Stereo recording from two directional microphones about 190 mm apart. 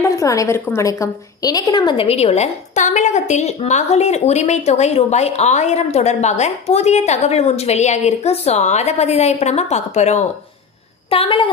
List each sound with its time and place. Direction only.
0.0 s a woman's voice: 15° left (ahead or behind)